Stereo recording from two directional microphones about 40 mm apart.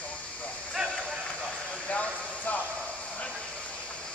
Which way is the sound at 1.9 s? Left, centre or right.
Left.